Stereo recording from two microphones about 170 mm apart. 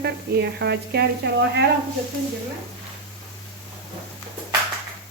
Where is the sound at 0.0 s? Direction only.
75° right (ahead or behind).